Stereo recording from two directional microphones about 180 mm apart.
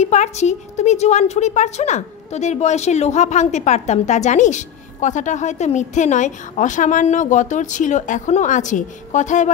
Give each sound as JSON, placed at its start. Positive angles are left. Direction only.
{"t": 0.0, "sound": "a woman's voice", "side_deg": 40}